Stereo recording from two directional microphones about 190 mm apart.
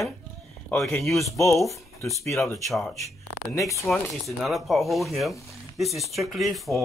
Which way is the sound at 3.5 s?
15° left (ahead or behind).